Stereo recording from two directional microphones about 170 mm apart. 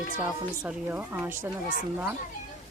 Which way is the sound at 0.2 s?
10° right (ahead or behind).